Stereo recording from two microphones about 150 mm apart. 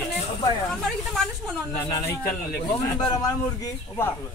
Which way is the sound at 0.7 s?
5° left (ahead or behind).